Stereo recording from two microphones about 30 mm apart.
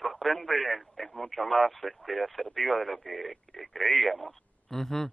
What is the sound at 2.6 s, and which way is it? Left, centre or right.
Speech, centre.